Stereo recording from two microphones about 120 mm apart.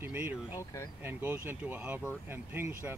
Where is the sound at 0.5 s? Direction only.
30° left (ahead or behind).